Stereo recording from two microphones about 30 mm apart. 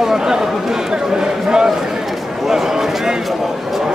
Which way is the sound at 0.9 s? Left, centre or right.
Right.